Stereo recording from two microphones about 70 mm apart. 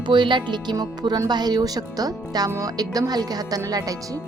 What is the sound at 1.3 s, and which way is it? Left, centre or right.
Speech, right.